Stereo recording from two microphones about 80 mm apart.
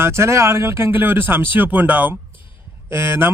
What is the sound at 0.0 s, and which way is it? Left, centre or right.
Speech, right.